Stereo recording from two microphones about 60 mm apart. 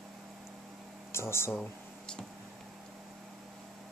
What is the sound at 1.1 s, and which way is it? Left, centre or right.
Speech, left.